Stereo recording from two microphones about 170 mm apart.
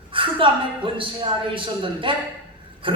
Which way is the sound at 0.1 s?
30° right (ahead or behind).